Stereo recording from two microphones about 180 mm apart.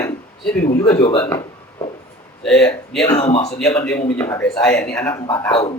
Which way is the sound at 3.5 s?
5° left (ahead or behind).